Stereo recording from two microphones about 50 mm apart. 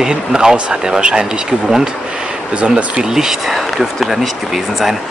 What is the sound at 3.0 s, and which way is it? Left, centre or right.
Speech, centre.